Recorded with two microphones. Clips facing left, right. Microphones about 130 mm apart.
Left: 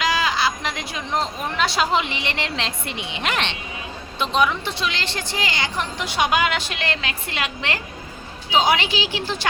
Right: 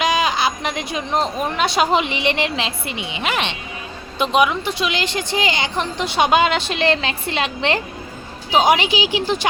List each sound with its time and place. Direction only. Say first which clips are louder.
0.0 s speech: right 3 dB; 20° right (ahead or behind)
2.6 s a woman's voice: right 3 dB; 5° right (ahead or behind)